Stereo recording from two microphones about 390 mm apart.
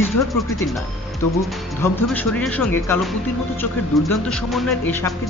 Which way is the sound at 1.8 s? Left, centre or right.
Centre.